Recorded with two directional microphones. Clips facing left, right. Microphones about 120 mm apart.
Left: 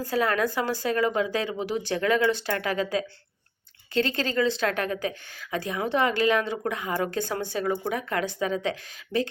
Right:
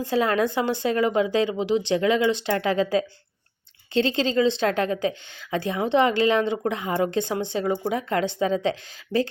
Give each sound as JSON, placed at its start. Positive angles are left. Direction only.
{"t": 0.0, "sound": "a woman's voice", "side_deg": -25}